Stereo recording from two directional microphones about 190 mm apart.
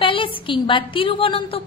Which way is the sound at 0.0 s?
25° left (ahead or behind).